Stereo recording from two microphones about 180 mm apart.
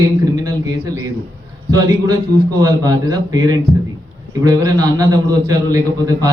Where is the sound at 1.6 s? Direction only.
20° right (ahead or behind).